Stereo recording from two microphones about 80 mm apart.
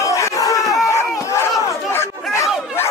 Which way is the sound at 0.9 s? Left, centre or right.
Left.